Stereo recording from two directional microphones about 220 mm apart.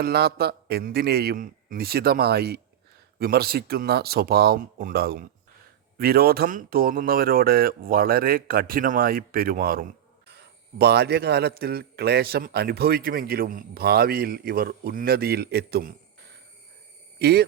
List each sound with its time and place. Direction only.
0.0 s speech: 45° right (ahead or behind)
17.2 s speech: 45° right (ahead or behind)